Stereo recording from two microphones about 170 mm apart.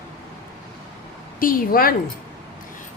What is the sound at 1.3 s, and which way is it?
Speech, 55° left (ahead or behind).